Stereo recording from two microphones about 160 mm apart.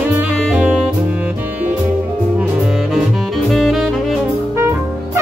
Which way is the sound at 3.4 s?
Centre (ahead or behind).